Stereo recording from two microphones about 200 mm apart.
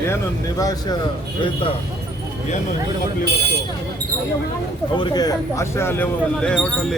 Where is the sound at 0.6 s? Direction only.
20° left (ahead or behind).